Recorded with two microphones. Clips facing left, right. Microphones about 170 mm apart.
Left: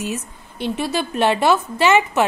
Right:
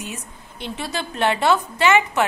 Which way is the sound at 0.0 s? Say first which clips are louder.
Left 7 dB; 15° right (ahead or behind).